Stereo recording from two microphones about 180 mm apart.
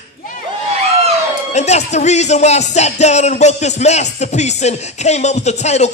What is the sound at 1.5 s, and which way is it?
Music, 40° left (ahead or behind).